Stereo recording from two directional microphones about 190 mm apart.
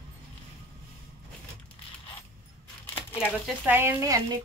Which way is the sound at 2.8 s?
10° left (ahead or behind).